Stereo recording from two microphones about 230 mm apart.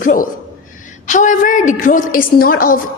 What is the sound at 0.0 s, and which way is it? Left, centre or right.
A woman's voice, left.